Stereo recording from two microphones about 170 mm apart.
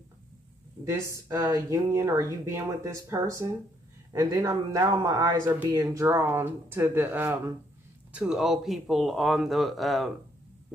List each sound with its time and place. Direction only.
0.8 s speech: 20° right (ahead or behind); by 10.1 s centre (ahead or behind)